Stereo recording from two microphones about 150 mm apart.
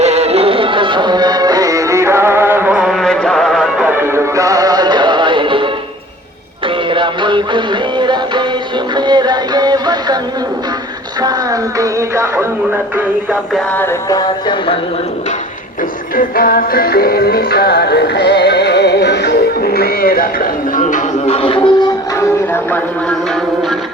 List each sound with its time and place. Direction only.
0.0 s music: 45° right (ahead or behind)
6.9 s music: 35° right (ahead or behind)
11.2 s music: 25° right (ahead or behind)
13.7 s music: 15° left (ahead or behind)
14.2 s speech: 30° left (ahead or behind)
16.1 s music: 75° left (ahead or behind); by 21.8 s 35° left (ahead or behind)
22.2 s music: 15° left (ahead or behind)